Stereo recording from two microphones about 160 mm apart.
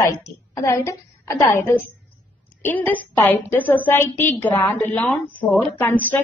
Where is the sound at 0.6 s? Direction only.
20° left (ahead or behind).